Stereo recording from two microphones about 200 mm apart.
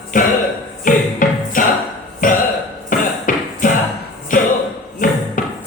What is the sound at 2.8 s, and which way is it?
Cough, 40° left (ahead or behind).